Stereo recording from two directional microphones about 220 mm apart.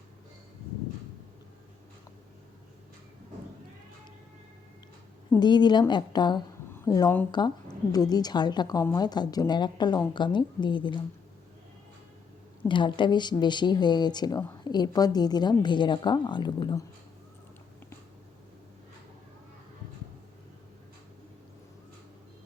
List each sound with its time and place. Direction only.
5.3 s a woman's voice: 20° left (ahead or behind)
12.6 s speech: 20° left (ahead or behind)